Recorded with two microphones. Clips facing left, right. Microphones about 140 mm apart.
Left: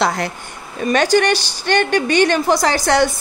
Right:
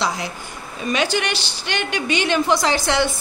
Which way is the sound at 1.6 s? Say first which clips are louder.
Left 8 dB; 50° left (ahead or behind).